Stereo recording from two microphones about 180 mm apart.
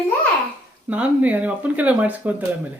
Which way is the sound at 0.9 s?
10° right (ahead or behind).